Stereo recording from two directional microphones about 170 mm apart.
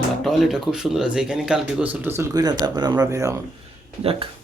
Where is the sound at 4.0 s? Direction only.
35° right (ahead or behind).